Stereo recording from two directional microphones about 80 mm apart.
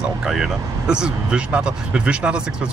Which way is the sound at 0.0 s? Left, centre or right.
Centre.